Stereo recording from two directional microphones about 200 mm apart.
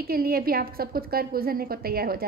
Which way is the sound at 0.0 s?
50° right (ahead or behind).